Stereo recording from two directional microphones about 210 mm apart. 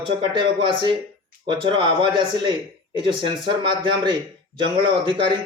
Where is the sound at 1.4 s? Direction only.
25° right (ahead or behind).